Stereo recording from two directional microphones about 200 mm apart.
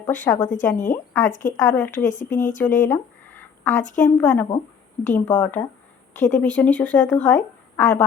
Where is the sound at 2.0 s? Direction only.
40° left (ahead or behind).